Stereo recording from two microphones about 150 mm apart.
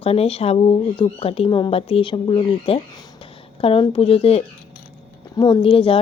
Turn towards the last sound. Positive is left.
turn(degrees=35)  # may be behind; listen again after turning